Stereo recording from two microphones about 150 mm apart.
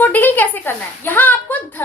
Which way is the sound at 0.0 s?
10° left (ahead or behind).